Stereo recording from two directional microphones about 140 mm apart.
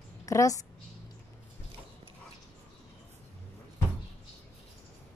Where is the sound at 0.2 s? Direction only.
25° left (ahead or behind).